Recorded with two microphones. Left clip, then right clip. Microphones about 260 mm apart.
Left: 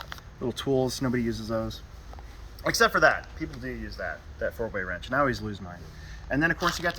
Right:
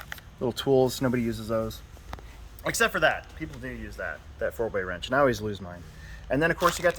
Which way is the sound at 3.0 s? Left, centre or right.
Centre.